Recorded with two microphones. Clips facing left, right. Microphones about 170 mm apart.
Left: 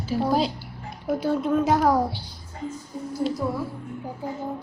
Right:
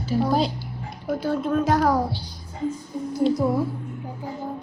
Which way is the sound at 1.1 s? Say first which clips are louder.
Left 1 dB; centre (ahead or behind).